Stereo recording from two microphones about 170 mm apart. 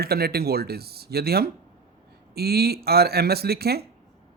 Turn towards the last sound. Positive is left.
turn(degrees=-70)  # may be behind; listen again after turning